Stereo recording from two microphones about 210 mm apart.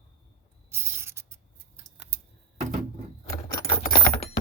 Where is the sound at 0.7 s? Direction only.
10° right (ahead or behind).